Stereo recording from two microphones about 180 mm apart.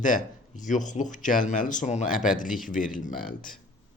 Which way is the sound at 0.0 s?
45° left (ahead or behind).